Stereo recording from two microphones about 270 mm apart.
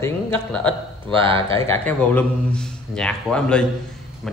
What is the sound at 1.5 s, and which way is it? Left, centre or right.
A man's voice, centre.